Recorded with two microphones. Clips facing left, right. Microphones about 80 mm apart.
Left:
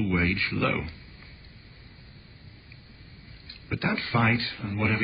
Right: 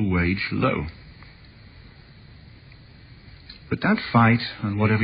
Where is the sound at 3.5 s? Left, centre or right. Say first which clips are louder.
Right 7 dB; right.